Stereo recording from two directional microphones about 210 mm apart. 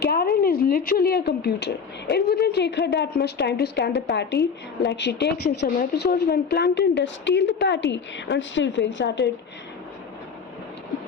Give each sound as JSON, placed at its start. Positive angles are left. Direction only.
{"t": 0.0, "sound": "speech", "side_deg": 45}